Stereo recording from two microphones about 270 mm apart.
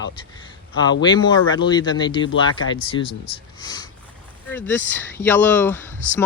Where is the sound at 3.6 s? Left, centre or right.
Centre.